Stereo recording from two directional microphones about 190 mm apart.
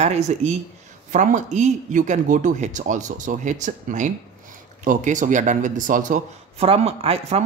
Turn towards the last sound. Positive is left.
turn(degrees=-30)  # may be behind; listen again after turning